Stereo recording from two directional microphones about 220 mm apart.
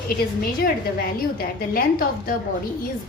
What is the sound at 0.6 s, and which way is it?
A woman's voice, 40° left (ahead or behind).